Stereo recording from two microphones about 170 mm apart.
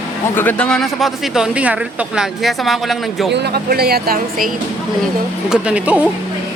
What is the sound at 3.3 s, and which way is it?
Speech, 75° right (ahead or behind).